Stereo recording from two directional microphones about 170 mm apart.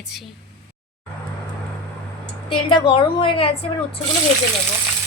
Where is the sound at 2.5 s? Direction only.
30° left (ahead or behind).